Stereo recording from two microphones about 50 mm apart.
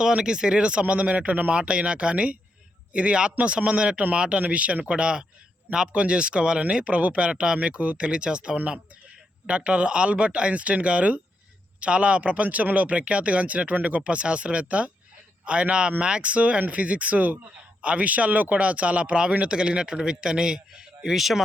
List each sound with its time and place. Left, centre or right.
0.0 s speech: centre